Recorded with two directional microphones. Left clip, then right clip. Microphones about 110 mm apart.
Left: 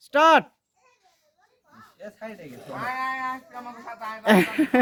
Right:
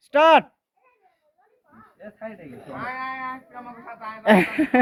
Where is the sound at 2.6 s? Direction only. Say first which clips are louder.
Left 2 dB; 25° left (ahead or behind).